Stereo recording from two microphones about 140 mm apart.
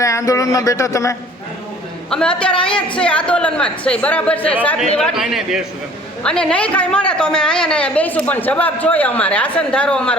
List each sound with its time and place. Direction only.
0.0 s speech: 20° left (ahead or behind)
2.0 s a woman's voice: 5° left (ahead or behind)
4.9 s a woman's voice: centre (ahead or behind)